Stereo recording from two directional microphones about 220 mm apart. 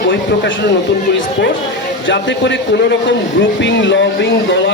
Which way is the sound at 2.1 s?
55° left (ahead or behind).